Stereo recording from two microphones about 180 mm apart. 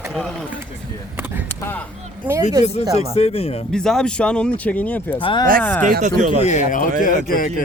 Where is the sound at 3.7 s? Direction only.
5° left (ahead or behind).